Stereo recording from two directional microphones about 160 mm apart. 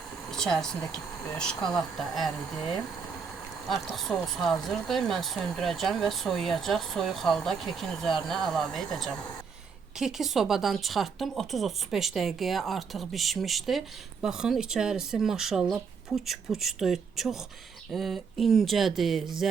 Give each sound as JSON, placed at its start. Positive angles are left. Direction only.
{"t": 0.3, "sound": "speech", "side_deg": 5}
{"t": 3.7, "sound": "speech", "side_deg": 0}